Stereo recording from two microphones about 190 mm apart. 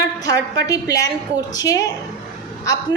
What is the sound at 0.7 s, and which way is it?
A woman's voice, 20° left (ahead or behind).